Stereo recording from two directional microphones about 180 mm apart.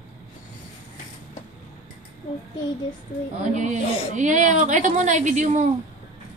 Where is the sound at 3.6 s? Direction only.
40° right (ahead or behind).